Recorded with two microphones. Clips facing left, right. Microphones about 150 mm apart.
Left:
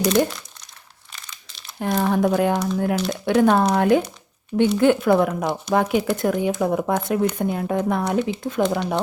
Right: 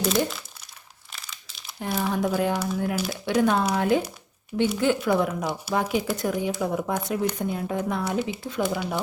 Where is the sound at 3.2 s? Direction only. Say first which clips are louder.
Left 5 dB; 55° left (ahead or behind).